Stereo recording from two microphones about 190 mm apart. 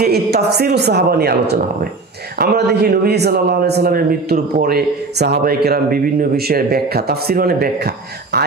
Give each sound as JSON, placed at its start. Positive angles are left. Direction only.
{"t": 0.0, "sound": "speech", "side_deg": -55}